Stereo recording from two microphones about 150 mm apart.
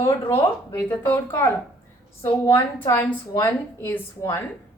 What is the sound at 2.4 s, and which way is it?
Speech, 35° left (ahead or behind).